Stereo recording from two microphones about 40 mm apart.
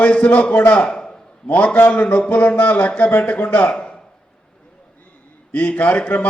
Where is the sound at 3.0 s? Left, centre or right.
Left.